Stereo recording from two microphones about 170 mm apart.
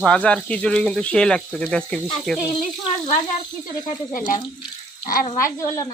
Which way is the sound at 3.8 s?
50° left (ahead or behind).